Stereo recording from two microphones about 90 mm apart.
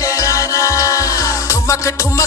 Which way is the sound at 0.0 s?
35° left (ahead or behind).